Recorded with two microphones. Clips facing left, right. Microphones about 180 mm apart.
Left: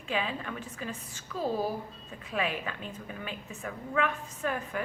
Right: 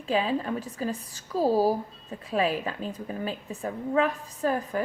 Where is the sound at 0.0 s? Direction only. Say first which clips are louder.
Right 7 dB; 35° right (ahead or behind).